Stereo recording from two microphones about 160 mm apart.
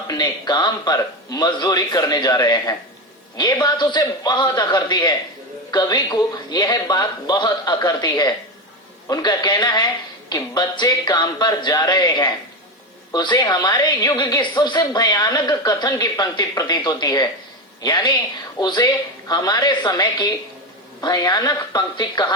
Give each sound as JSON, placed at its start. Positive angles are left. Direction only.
{"t": 0.1, "sound": "a woman's voice", "side_deg": 25}